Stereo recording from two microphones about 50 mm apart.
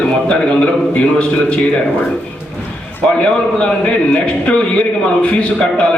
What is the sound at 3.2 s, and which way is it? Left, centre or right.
Speech, left.